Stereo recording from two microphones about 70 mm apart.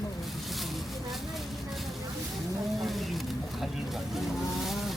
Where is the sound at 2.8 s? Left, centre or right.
Centre.